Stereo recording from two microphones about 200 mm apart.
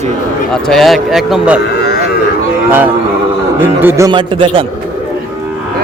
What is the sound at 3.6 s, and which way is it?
A man's voice, 10° right (ahead or behind).